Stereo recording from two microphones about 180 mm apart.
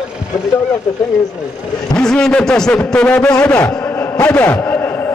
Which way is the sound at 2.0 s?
5° left (ahead or behind).